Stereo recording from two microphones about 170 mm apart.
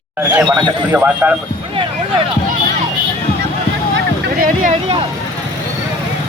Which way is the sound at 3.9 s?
90° right.